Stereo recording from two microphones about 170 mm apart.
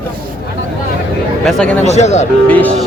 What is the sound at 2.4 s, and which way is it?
Speech, 10° left (ahead or behind).